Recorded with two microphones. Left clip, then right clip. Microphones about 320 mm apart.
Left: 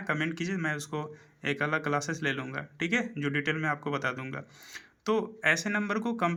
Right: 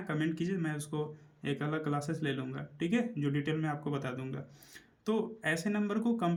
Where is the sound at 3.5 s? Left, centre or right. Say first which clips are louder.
Left 5 dB; left.